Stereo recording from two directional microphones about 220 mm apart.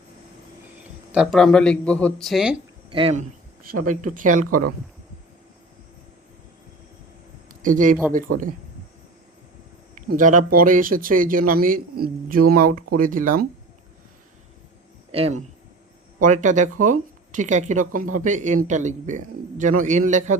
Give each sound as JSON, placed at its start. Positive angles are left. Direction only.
{"t": 1.1, "sound": "speech", "side_deg": 0}
{"t": 2.9, "sound": "speech", "side_deg": -25}
{"t": 7.6, "sound": "speech", "side_deg": -35}
{"t": 10.1, "sound": "speech", "side_deg": -35}
{"t": 15.1, "sound": "speech", "side_deg": -25}